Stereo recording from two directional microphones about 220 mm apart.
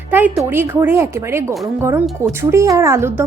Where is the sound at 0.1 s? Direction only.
10° right (ahead or behind).